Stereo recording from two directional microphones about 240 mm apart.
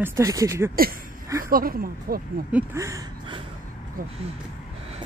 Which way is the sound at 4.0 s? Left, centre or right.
Right.